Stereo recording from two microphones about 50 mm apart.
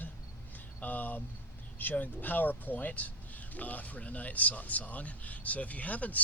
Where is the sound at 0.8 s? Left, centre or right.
Left.